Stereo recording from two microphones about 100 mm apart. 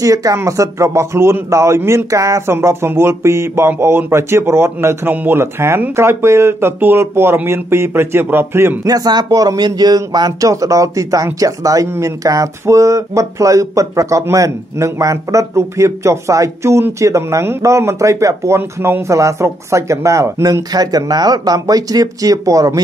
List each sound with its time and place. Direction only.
0.0 s a man's voice: 35° right (ahead or behind)
8.8 s speech: 40° right (ahead or behind)
20.7 s speech: 40° right (ahead or behind)